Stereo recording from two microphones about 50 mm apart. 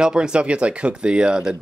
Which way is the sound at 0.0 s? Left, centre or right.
Centre.